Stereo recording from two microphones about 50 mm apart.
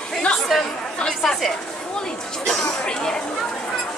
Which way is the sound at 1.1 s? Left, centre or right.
Centre.